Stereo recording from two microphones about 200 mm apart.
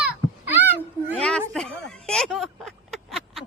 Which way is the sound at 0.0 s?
10° right (ahead or behind).